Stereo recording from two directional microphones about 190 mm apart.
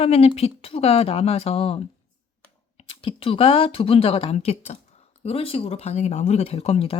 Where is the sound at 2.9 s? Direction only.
30° left (ahead or behind).